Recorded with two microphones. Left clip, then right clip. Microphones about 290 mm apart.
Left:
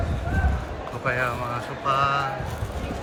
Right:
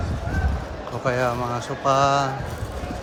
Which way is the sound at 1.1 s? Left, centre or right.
Centre.